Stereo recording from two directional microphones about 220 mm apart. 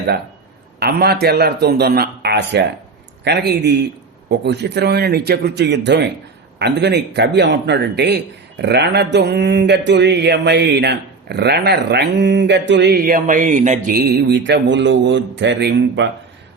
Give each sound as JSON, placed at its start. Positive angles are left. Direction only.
{"t": 0.8, "sound": "speech", "side_deg": -45}